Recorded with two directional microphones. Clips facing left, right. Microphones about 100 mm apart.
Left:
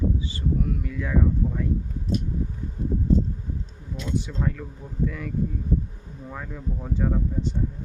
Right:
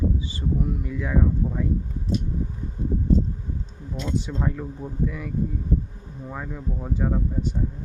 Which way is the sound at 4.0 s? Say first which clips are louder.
Right 1 dB; 20° right (ahead or behind).